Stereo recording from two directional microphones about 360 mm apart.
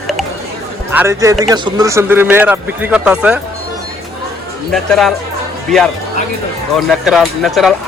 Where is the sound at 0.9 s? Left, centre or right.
Centre.